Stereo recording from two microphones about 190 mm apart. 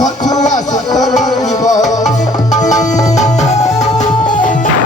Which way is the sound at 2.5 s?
40° left (ahead or behind).